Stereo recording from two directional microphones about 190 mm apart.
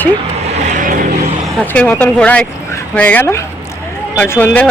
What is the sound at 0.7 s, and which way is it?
Vehicle, 45° right (ahead or behind).